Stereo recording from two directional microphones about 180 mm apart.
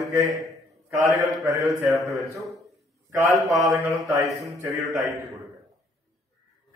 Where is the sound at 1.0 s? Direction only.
20° right (ahead or behind).